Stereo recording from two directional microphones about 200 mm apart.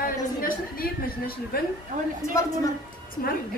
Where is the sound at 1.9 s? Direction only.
40° right (ahead or behind).